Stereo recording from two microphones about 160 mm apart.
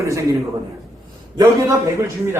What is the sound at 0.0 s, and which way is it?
Speech, 20° right (ahead or behind).